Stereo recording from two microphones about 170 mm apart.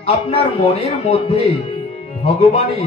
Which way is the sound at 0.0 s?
35° left (ahead or behind).